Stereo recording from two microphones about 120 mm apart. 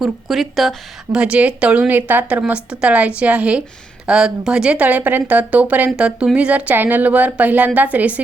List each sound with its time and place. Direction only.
0.0 s speech: centre (ahead or behind)